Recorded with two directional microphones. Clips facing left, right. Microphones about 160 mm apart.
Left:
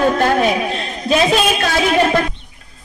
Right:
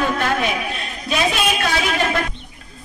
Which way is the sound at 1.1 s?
40° left (ahead or behind).